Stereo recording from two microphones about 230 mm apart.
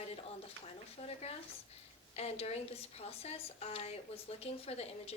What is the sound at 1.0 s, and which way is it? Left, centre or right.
A woman's voice, left.